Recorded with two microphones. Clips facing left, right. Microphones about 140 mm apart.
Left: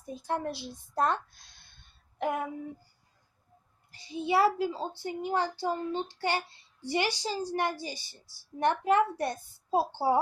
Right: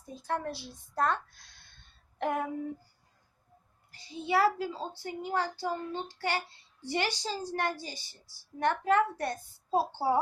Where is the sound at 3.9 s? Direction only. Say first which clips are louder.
Left 2 dB; 20° left (ahead or behind).